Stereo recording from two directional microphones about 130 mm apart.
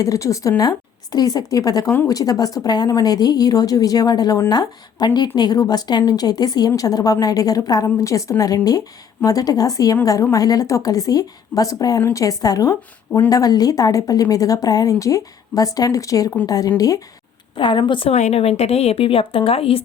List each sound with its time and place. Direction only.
0.0 s speech: 25° left (ahead or behind)
17.6 s a woman's voice: 40° left (ahead or behind)
18.1 s speech: 60° left (ahead or behind)